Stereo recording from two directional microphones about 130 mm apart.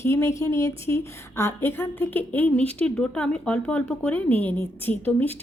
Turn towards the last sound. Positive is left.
turn(degrees=15)  # may be behind; listen again after turning